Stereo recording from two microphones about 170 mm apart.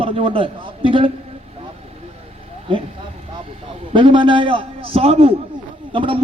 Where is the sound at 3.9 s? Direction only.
30° right (ahead or behind).